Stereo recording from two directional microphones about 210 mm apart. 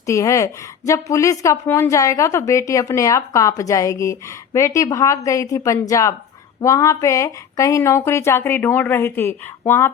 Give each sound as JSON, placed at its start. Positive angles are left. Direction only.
{"t": 0.0, "sound": "a woman's voice", "side_deg": 15}